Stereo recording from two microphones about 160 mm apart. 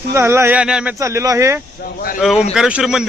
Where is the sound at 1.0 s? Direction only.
20° right (ahead or behind).